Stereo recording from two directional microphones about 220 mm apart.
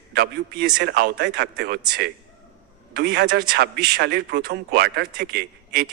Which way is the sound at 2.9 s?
45° right (ahead or behind).